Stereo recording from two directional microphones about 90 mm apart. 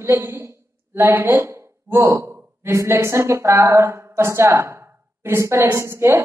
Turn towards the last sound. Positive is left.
turn(degrees=-30)  # may be behind; listen again after turning